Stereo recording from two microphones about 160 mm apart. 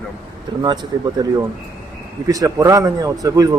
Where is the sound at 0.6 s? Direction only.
25° right (ahead or behind).